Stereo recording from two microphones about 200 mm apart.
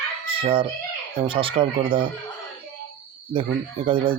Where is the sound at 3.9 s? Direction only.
25° right (ahead or behind).